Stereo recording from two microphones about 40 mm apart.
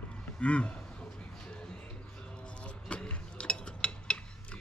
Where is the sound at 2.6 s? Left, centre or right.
Left.